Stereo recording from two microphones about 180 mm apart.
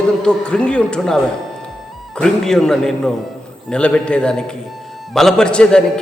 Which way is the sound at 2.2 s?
5° left (ahead or behind).